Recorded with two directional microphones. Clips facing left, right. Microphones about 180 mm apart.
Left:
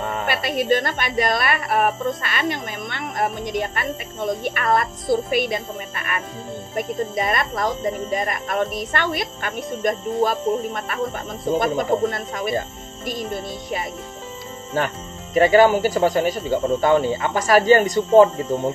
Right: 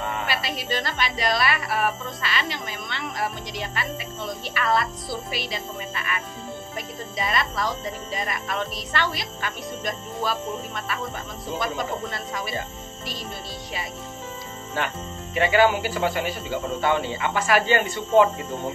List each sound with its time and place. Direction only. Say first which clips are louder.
0.0 s speech: left 4 dB; 45° left (ahead or behind)